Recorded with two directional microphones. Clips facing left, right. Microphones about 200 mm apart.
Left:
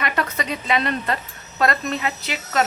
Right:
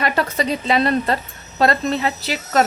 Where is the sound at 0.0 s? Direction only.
35° right (ahead or behind).